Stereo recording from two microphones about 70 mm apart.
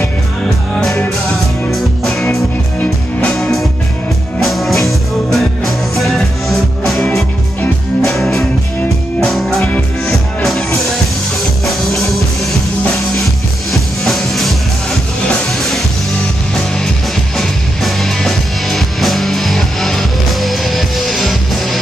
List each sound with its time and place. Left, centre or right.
0.7 s music: centre
2.8 s music: centre
3.3 s music: centre
17.4 s music: centre